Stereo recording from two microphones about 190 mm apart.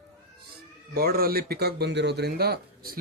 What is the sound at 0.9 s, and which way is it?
Speech, 55° right (ahead or behind).